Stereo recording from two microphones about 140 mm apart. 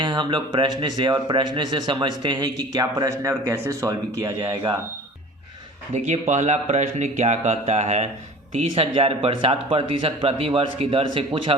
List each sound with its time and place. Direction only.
0.0 s speech: 35° right (ahead or behind)
5.9 s speech: 55° right (ahead or behind); by 11.5 s 40° right (ahead or behind)